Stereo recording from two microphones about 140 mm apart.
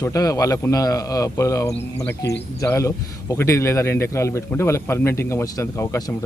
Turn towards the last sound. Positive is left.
turn(degrees=20)  # may be behind; listen again after turning